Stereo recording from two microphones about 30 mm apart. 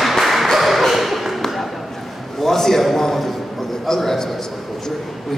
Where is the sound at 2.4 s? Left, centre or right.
Centre.